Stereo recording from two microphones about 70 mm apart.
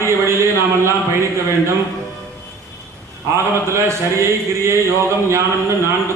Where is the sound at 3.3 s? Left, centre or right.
Right.